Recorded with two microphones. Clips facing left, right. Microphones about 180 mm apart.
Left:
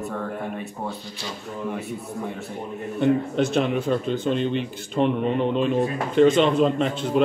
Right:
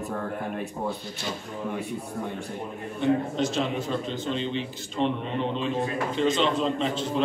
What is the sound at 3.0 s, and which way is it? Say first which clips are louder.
A man's voice: left 3 dB; 60° left (ahead or behind).